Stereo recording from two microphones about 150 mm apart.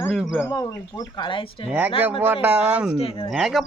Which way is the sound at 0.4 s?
25° left (ahead or behind).